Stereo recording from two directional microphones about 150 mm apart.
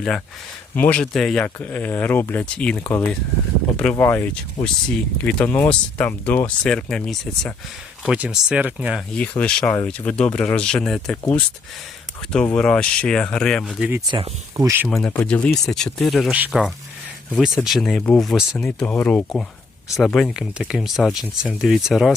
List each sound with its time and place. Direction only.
0.8 s speech: 10° left (ahead or behind); by 9.0 s 10° right (ahead or behind)
9.1 s speech: 10° left (ahead or behind)
12.3 s speech: 5° left (ahead or behind)
14.1 s speech: 25° right (ahead or behind)
14.8 s speech: 5° left (ahead or behind)